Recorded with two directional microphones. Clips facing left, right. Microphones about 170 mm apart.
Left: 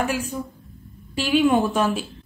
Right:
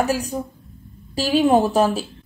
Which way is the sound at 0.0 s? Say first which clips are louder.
Right 3 dB; 40° right (ahead or behind).